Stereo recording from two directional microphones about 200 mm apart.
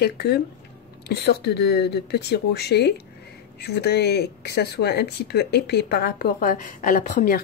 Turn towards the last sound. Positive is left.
turn(degrees=40)  # may be behind; listen again after turning